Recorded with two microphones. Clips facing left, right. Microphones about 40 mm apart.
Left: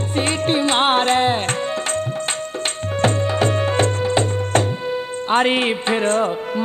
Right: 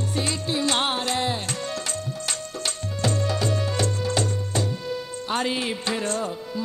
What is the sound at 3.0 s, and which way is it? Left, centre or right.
Music, left.